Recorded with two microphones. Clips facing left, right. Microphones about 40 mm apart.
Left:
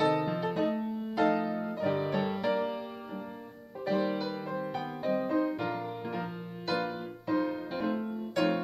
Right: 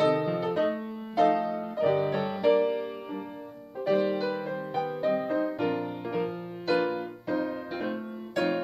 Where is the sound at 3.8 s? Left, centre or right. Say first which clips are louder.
Right 5 dB; centre.